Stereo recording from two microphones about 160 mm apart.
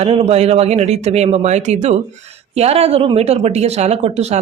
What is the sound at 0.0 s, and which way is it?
A woman's voice, 40° right (ahead or behind).